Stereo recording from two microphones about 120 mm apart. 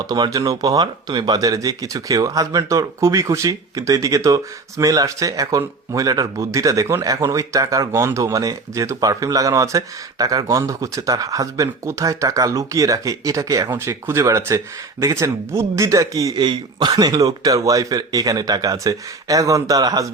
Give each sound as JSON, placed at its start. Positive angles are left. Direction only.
{"t": 0.1, "sound": "speech", "side_deg": -35}